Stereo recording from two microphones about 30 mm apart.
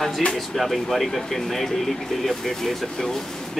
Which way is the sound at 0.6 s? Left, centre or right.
Centre.